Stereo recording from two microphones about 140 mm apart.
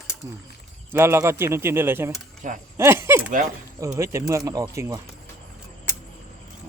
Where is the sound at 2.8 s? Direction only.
15° right (ahead or behind).